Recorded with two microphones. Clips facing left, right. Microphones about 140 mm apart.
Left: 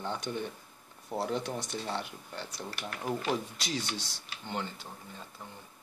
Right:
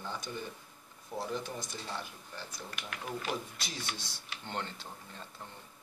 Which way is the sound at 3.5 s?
80° left.